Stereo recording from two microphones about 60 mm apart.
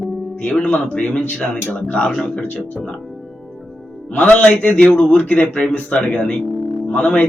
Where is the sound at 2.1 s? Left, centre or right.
Centre.